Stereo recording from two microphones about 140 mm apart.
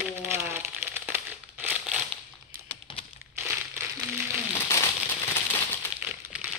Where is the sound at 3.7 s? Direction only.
15° right (ahead or behind).